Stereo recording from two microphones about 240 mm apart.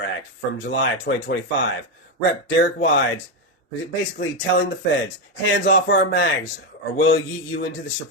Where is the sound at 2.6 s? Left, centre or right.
Left.